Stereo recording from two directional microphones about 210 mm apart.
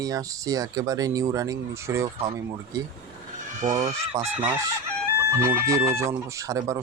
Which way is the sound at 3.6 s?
30° right (ahead or behind).